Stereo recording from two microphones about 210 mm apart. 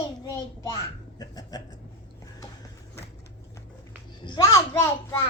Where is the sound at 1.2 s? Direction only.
20° left (ahead or behind).